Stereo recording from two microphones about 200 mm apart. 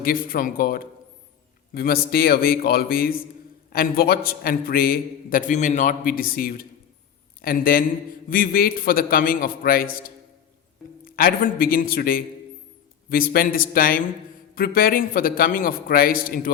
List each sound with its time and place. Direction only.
0.0 s a man's voice: 45° left (ahead or behind)
11.0 s a man's voice: 45° left (ahead or behind)